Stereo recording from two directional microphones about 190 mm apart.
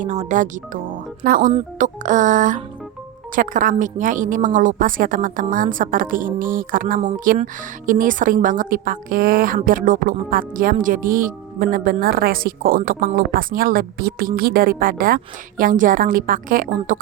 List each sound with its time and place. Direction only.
0.0 s speech: 40° right (ahead or behind)